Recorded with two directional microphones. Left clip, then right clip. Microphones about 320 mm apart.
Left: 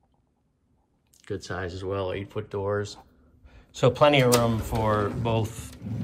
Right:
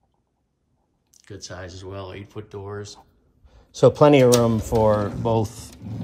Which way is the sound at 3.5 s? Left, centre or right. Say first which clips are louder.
Right 7 dB; centre.